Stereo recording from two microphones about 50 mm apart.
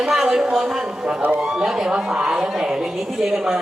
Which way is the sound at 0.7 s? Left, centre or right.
Centre.